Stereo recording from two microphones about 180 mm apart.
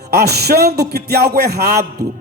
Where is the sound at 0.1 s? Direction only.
65° right (ahead or behind).